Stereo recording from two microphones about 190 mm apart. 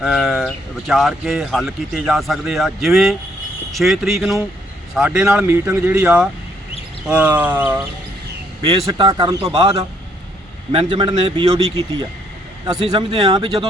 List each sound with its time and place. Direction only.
0.0 s speech: centre (ahead or behind)
8.9 s speech: 25° right (ahead or behind)
12.9 s speech: 25° right (ahead or behind)